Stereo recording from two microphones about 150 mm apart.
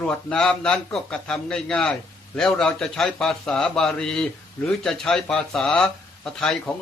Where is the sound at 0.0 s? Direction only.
5° left (ahead or behind).